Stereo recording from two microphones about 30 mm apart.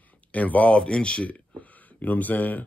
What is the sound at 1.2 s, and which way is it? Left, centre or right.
Speech, left.